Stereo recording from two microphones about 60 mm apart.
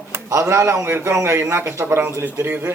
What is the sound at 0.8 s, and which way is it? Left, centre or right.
A man's voice, right.